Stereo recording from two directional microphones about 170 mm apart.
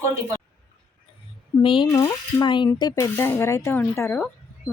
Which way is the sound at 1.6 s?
30° left (ahead or behind).